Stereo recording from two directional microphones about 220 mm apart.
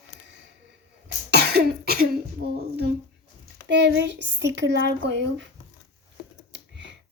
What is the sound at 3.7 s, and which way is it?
Speech, 55° right (ahead or behind).